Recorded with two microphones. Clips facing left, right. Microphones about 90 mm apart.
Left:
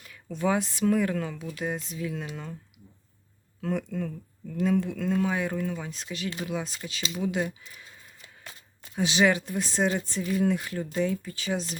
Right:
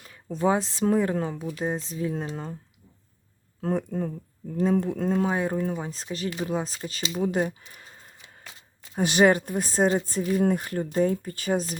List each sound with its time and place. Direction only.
0.0 s speech: 35° right (ahead or behind)
3.6 s speech: 35° right (ahead or behind)